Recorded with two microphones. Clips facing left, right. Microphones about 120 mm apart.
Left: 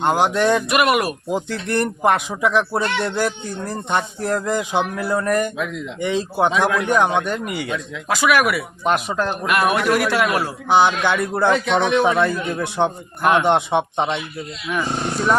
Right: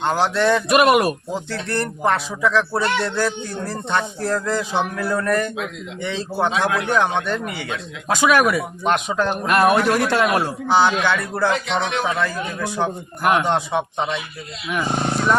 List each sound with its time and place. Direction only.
0.0 s speech: 15° left (ahead or behind)
0.7 s a man's voice: 25° right (ahead or behind)
1.3 s speech: 15° left (ahead or behind)
8.1 s a man's voice: 20° right (ahead or behind)
8.9 s speech: 5° left (ahead or behind)
9.5 s a man's voice: 30° right (ahead or behind)
10.7 s speech: 15° left (ahead or behind)